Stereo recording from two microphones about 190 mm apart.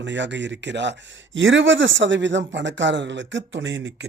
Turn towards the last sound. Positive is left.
turn(degrees=-70)  # may be behind; listen again after turning